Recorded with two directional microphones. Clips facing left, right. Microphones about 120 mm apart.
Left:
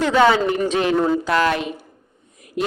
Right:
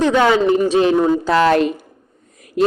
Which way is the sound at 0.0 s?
20° right (ahead or behind).